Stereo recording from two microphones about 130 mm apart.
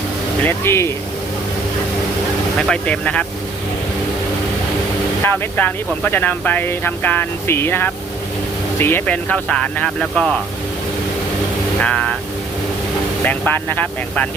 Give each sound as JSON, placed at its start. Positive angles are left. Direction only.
{"t": 0.4, "sound": "speech", "side_deg": 20}
{"t": 2.6, "sound": "speech", "side_deg": 5}
{"t": 5.2, "sound": "speech", "side_deg": 15}
{"t": 11.8, "sound": "speech", "side_deg": 10}
{"t": 13.2, "sound": "speech", "side_deg": 15}